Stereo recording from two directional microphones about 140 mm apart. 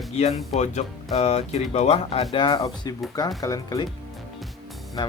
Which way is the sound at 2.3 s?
35° left (ahead or behind).